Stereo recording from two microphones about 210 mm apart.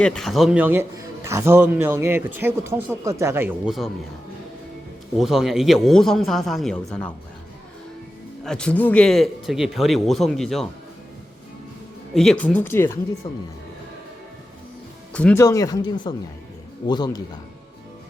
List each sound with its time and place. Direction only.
0.0 s a man's voice: 5° left (ahead or behind)
5.1 s speech: centre (ahead or behind)
8.4 s speech: 5° left (ahead or behind)
12.1 s speech: centre (ahead or behind)
13.2 s speech: 25° left (ahead or behind)
15.1 s speech: 5° left (ahead or behind)